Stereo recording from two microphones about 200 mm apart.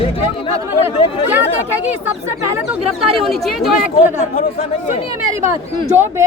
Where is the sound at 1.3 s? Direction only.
10° right (ahead or behind).